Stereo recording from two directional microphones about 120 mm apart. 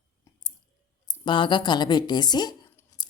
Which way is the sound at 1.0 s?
40° left (ahead or behind).